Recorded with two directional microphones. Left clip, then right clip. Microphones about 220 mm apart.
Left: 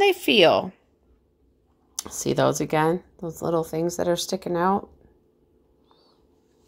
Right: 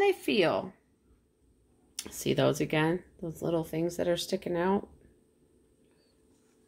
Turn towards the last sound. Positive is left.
turn(degrees=25)  # may be behind; listen again after turning